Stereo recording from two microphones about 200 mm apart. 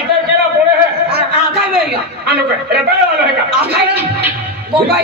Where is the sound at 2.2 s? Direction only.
55° right (ahead or behind).